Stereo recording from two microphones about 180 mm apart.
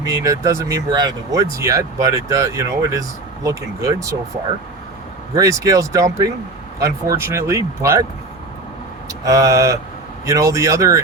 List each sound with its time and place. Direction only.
0.0 s speech: 20° right (ahead or behind)
5.3 s speech: 20° right (ahead or behind)
9.2 s speech: 20° right (ahead or behind)